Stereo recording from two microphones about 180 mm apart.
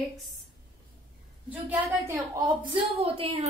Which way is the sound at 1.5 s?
10° right (ahead or behind).